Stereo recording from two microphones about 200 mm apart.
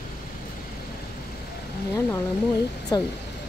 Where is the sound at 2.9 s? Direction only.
20° left (ahead or behind).